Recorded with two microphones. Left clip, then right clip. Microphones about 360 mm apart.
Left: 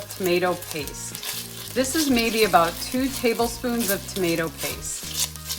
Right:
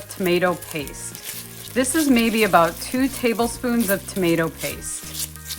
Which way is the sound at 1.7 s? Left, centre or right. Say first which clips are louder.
Right 3 dB; centre.